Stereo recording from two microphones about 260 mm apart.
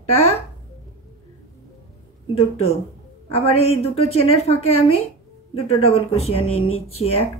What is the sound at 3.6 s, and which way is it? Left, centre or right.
A woman's voice, left.